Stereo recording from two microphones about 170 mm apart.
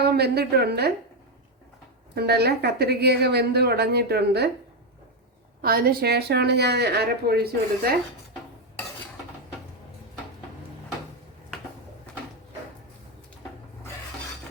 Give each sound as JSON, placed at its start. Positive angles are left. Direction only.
{"t": 0.0, "sound": "a woman's voice", "side_deg": -70}
{"t": 2.1, "sound": "a woman's voice", "side_deg": -70}
{"t": 5.6, "sound": "a woman's voice", "side_deg": -60}